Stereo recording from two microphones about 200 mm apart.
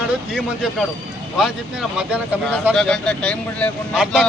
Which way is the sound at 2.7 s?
5° left (ahead or behind).